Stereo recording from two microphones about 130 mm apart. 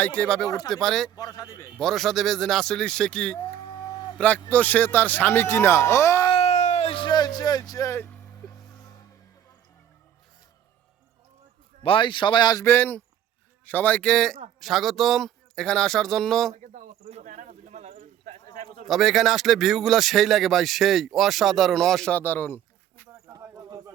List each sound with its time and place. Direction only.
0.0 s speech: 10° left (ahead or behind)
1.1 s a man's voice: 30° left (ahead or behind)
1.8 s speech: 5° left (ahead or behind)
3.7 s a sound: 30° left (ahead or behind)
4.2 s speech: 10° left (ahead or behind)
6.3 s a sound: 55° left (ahead or behind); by 8.1 s 20° left (ahead or behind)
11.8 s speech: 40° left (ahead or behind)
12.6 s speech: 15° left (ahead or behind)
16.6 s cricket: 60° right (ahead or behind)
18.9 s speech: centre (ahead or behind); by 23.0 s 15° left (ahead or behind)
23.2 s bird: 25° right (ahead or behind)